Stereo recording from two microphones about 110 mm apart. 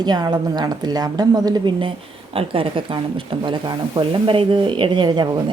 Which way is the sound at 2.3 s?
55° right (ahead or behind).